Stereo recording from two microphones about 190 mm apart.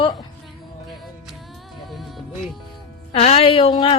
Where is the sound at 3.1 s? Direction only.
30° left (ahead or behind).